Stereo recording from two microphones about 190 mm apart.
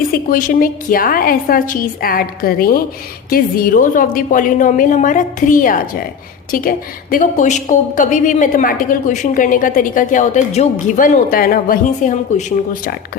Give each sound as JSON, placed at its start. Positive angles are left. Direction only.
{"t": 0.1, "sound": "a woman's voice", "side_deg": 45}